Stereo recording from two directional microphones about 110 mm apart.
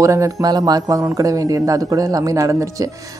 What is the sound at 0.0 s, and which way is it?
A woman's voice, 30° right (ahead or behind).